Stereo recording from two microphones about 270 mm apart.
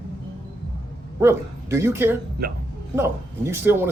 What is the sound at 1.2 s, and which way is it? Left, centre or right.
Speech, centre.